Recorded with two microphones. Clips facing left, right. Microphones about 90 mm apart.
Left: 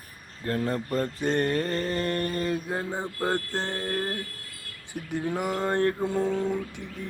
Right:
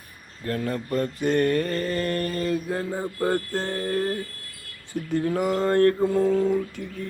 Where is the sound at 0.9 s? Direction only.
30° left (ahead or behind).